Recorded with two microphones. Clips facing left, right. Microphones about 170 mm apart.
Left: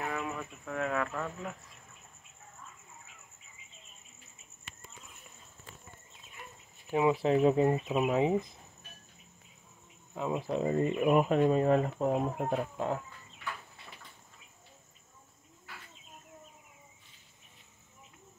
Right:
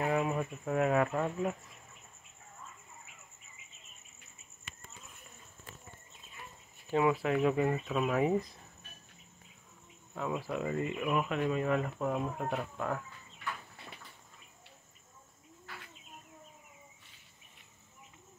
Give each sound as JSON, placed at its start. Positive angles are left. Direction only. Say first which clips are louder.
{"t": 0.0, "sound": "a sound", "louder": "right 5 dB", "side_deg": -30}
{"t": 6.9, "sound": "speech", "louder": "left 1 dB", "side_deg": 20}
{"t": 7.2, "sound": "speech", "louder": "left 4 dB", "side_deg": 30}
{"t": 7.7, "sound": "speech", "louder": "left 3 dB", "side_deg": 15}
{"t": 10.1, "sound": "speech", "louder": "left 3 dB", "side_deg": 20}
{"t": 12.5, "sound": "speech", "louder": "left 3 dB", "side_deg": 25}